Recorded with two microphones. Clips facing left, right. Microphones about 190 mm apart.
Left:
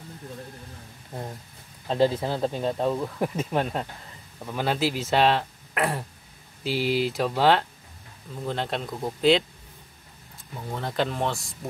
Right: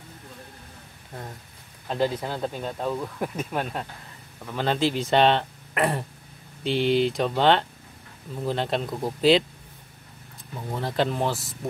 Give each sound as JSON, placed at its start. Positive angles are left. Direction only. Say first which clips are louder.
{"t": 2.0, "sound": "speech", "louder": "left 3 dB", "side_deg": 10}
{"t": 2.4, "sound": "speech", "louder": "left 6 dB", "side_deg": 25}
{"t": 4.5, "sound": "speech", "louder": "right 1 dB", "side_deg": 10}
{"t": 10.7, "sound": "speech", "louder": "right 2 dB", "side_deg": 0}